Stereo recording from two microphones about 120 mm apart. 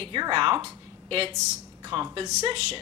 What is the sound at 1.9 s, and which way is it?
Speech, 50° right (ahead or behind).